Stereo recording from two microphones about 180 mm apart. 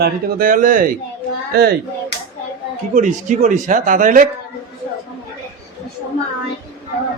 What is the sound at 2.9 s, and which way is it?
A man's voice, 45° right (ahead or behind).